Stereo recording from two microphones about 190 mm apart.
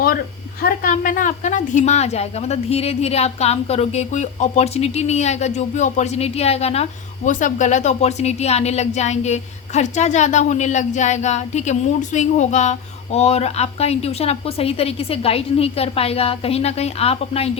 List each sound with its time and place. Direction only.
0.6 s a woman's voice: 50° left (ahead or behind); by 17.5 s 30° left (ahead or behind)